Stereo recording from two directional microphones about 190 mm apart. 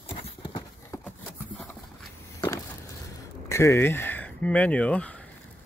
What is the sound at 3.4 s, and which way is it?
Speech, 15° left (ahead or behind).